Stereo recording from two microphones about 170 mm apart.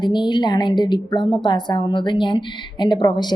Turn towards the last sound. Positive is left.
turn(degrees=25)  # may be behind; listen again after turning